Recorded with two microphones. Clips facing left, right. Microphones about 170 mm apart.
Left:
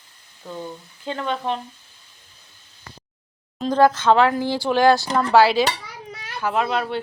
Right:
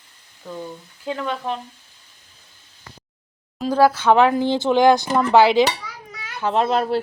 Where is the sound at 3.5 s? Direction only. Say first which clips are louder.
Even; 5° right (ahead or behind).